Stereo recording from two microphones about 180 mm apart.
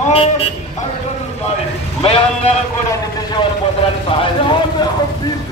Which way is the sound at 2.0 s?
35° left (ahead or behind).